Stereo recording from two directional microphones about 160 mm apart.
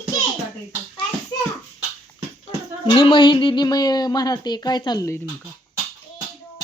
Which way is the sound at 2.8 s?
30° left (ahead or behind).